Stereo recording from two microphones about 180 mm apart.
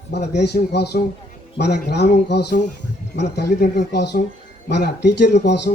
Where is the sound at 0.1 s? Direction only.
65° left (ahead or behind).